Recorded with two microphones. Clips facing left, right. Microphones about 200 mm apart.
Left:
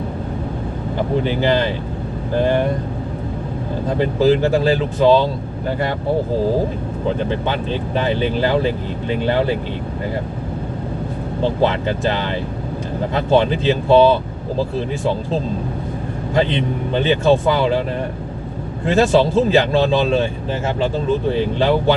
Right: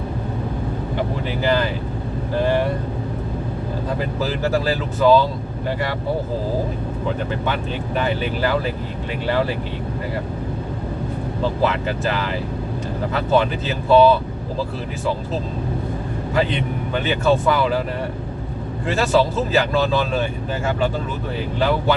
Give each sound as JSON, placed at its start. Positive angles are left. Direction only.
{"t": 1.4, "sound": "speech", "side_deg": 25}
{"t": 4.3, "sound": "speech", "side_deg": 25}
{"t": 7.4, "sound": "speech", "side_deg": 25}
{"t": 11.6, "sound": "speech", "side_deg": 30}
{"t": 16.9, "sound": "speech", "side_deg": 25}
{"t": 19.0, "sound": "speech", "side_deg": 30}